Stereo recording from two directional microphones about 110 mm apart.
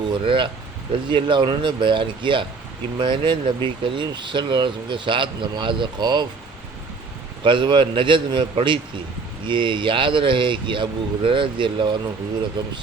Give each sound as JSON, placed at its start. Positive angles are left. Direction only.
{"t": 0.1, "sound": "speech", "side_deg": -50}
{"t": 7.4, "sound": "speech", "side_deg": -45}